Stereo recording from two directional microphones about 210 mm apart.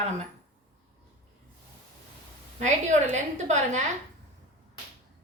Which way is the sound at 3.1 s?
35° right (ahead or behind).